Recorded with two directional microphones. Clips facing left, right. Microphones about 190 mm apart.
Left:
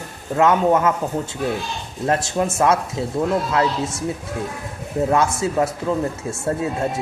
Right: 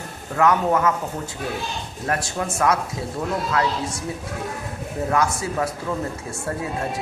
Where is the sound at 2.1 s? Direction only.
25° left (ahead or behind).